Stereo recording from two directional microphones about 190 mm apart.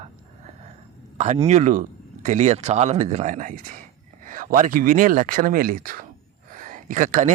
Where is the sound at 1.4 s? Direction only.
40° right (ahead or behind).